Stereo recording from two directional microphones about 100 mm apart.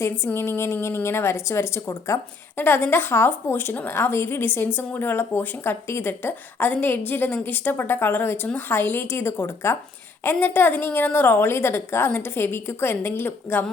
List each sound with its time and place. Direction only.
0.3 s speech: 25° left (ahead or behind)